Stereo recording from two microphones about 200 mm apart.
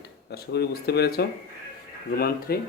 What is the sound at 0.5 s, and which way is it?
Speech, 55° left (ahead or behind).